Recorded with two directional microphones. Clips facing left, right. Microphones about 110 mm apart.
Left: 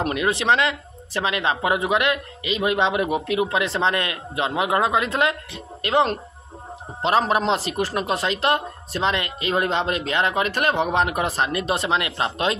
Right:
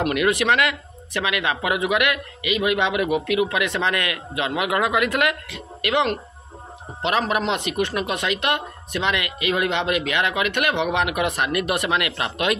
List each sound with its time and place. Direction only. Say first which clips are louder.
0.0 s speech: right 2 dB; 25° left (ahead or behind)